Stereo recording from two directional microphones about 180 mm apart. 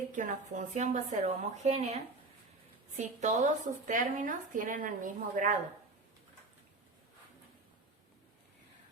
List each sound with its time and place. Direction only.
0.1 s a woman's voice: 45° right (ahead or behind)